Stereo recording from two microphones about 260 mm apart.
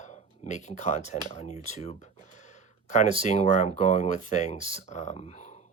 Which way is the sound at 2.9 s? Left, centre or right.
Left.